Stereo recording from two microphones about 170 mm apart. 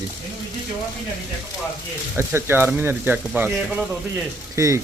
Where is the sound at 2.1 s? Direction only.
15° right (ahead or behind).